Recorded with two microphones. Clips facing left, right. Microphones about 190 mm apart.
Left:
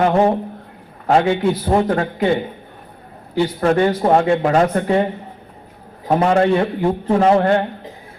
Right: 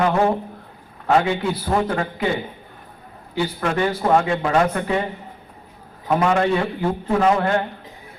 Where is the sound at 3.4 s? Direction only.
35° left (ahead or behind).